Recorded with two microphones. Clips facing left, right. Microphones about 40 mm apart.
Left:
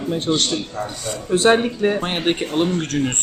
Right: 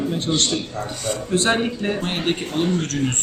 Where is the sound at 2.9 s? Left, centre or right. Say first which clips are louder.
Left 5 dB; centre.